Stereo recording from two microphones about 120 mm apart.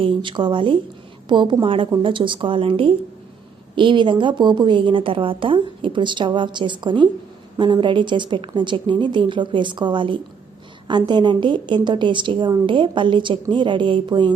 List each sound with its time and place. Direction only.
0.0 s a woman's voice: 45° right (ahead or behind)